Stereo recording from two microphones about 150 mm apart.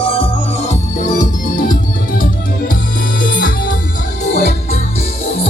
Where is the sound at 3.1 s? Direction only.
70° left (ahead or behind).